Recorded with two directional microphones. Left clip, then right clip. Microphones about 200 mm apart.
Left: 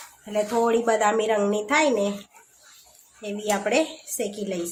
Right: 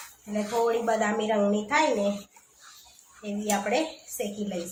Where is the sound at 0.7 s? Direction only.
55° left (ahead or behind).